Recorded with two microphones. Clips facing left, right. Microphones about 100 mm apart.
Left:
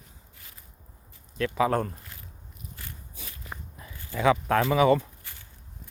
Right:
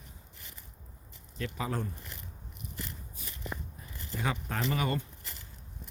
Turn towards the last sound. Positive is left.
turn(degrees=85)